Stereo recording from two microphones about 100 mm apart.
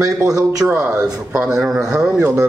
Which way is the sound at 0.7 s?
10° right (ahead or behind).